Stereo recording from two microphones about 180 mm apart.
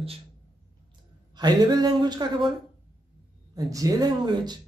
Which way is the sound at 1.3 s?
25° right (ahead or behind).